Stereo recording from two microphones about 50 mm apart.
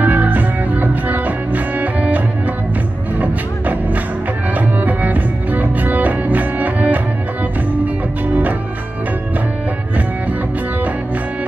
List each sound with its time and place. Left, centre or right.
0.0 s music: right